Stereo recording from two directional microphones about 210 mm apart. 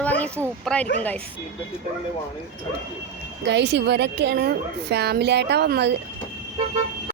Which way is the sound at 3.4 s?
55° right (ahead or behind).